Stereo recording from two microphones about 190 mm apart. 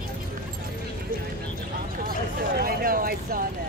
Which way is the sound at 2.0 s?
50° right (ahead or behind).